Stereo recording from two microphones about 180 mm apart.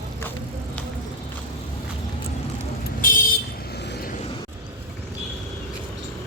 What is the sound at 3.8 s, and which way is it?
Vehicle, 70° left (ahead or behind).